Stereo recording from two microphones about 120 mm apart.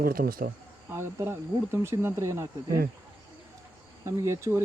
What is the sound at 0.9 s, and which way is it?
Speech, 20° right (ahead or behind).